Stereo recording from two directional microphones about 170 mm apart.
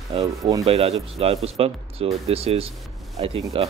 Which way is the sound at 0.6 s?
35° right (ahead or behind).